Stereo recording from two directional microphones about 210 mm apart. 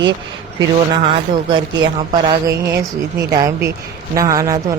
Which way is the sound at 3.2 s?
15° right (ahead or behind).